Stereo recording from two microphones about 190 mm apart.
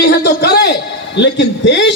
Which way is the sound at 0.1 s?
55° left (ahead or behind).